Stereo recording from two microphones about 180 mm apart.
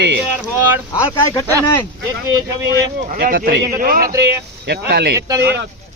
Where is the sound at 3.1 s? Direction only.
55° right (ahead or behind).